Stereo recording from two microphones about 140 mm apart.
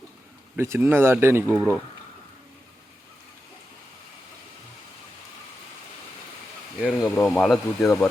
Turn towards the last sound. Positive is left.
turn(degrees=0)  # may be behind; listen again after turning